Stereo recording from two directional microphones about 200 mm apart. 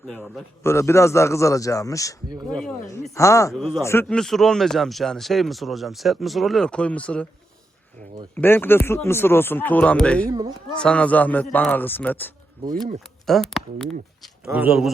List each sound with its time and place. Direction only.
0.1 s speech: centre (ahead or behind)
0.6 s speech: 15° left (ahead or behind)
2.5 s speech: 5° left (ahead or behind)
3.2 s speech: 15° left (ahead or behind)
3.5 s speech: 5° left (ahead or behind)
8.4 s speech: 10° left (ahead or behind)
10.2 s a child's voice: 15° right (ahead or behind)
10.8 s speech: 5° left (ahead or behind)